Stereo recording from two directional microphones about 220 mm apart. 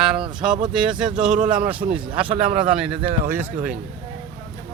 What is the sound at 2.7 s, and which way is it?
Speech, 5° right (ahead or behind).